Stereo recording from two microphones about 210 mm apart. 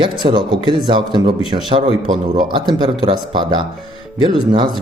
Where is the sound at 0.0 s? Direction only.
20° right (ahead or behind).